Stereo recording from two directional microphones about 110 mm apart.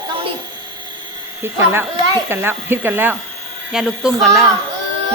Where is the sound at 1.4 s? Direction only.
20° right (ahead or behind).